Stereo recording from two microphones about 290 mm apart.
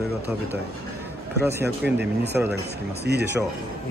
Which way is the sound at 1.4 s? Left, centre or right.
Centre.